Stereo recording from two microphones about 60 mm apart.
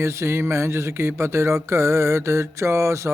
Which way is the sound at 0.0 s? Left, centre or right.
Right.